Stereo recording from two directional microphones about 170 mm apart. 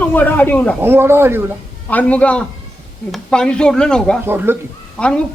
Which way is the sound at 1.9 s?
10° left (ahead or behind).